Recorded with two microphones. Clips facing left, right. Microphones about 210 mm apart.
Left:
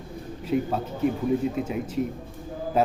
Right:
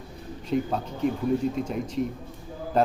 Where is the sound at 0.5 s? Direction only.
5° left (ahead or behind).